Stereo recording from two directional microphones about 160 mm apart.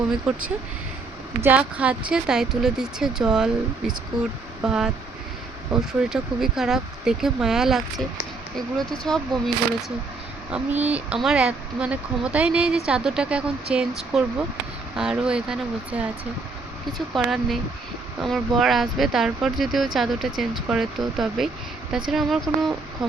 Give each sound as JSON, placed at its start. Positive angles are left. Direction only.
{"t": 0.3, "sound": "speech", "side_deg": -10}
{"t": 10.5, "sound": "speech", "side_deg": -10}
{"t": 17.2, "sound": "speech", "side_deg": -5}